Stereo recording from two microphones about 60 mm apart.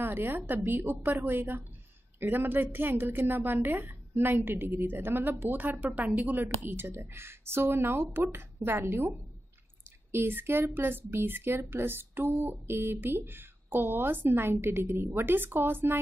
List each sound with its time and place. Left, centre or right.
0.0 s a woman's voice: right
10.1 s a woman's voice: right